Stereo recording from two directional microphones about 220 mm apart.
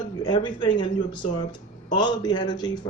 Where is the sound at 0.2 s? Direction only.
20° left (ahead or behind).